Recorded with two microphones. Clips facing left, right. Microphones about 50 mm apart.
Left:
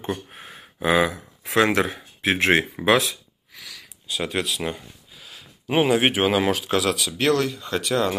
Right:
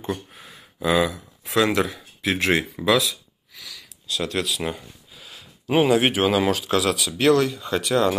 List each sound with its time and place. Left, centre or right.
0.3 s a sound: left
1.4 s speech: left
3.5 s sniff: centre
4.1 s speech: centre
4.5 s a sound: centre
5.8 s speech: centre